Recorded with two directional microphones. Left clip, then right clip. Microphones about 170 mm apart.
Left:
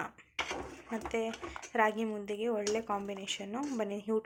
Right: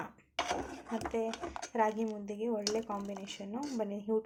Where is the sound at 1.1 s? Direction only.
Centre (ahead or behind).